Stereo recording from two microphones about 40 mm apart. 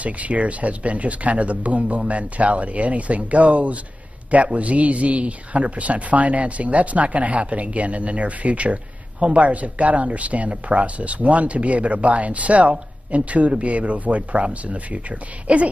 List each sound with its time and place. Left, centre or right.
0.0 s speech: right